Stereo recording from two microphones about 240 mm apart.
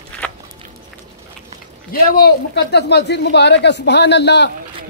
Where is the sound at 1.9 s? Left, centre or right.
Left.